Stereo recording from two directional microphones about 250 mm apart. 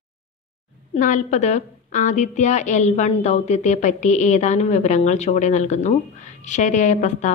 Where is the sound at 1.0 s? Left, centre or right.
Left.